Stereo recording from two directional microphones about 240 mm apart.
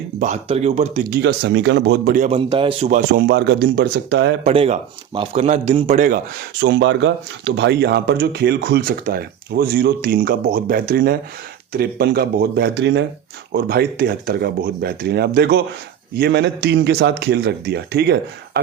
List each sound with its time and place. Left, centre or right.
0.2 s speech: right
1.2 s speech: right
4.4 s speech: right
6.6 s speech: right